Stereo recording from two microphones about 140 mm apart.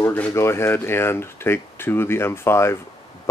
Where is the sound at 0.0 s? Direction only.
20° left (ahead or behind).